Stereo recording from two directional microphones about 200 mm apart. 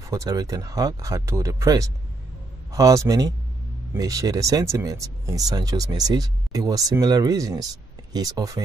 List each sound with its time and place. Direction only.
0.1 s speech: 15° right (ahead or behind)